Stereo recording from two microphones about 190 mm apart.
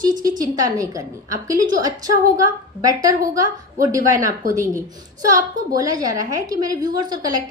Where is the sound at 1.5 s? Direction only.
45° right (ahead or behind).